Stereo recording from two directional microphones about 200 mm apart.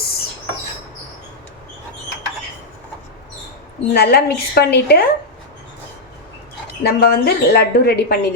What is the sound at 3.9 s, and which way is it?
A woman's voice, 55° left (ahead or behind).